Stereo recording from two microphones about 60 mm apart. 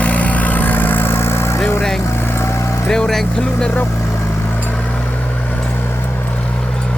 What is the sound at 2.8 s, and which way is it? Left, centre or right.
Speech, centre.